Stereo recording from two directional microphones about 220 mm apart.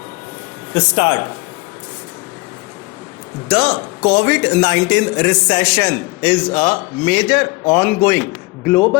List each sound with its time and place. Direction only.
0.7 s a man's voice: 20° left (ahead or behind)
3.5 s a man's voice: 15° left (ahead or behind)